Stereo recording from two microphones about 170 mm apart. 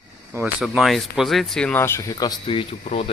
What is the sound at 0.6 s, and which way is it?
Speech, centre (ahead or behind).